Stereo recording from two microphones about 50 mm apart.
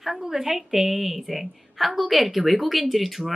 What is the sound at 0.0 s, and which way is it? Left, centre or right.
Speech, centre.